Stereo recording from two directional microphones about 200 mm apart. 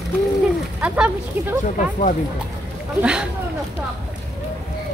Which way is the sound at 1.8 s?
40° left (ahead or behind).